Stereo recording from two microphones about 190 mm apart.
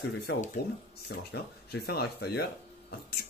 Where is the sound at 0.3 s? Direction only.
65° left (ahead or behind).